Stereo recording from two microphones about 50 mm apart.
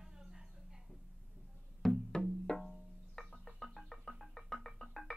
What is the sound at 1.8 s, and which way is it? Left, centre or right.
Music, centre.